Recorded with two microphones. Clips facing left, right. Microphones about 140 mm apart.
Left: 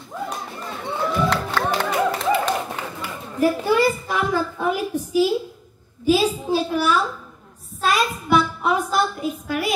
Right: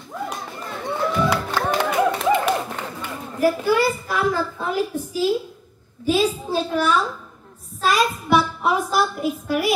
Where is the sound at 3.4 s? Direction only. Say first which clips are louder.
Even; 20° left (ahead or behind).